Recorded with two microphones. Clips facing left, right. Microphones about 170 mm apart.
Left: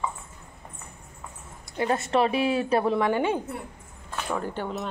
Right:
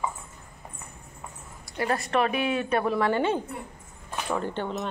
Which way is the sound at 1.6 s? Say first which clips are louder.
Left 2 dB; 20° left (ahead or behind).